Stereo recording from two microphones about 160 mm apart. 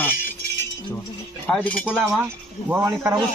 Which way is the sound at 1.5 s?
5° left (ahead or behind).